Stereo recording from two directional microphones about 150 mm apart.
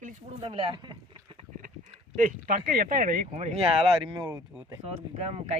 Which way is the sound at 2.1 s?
65° right (ahead or behind).